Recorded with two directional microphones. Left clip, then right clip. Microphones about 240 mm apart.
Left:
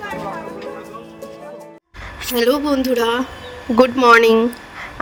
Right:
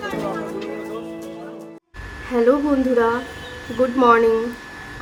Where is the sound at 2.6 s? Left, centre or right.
Left.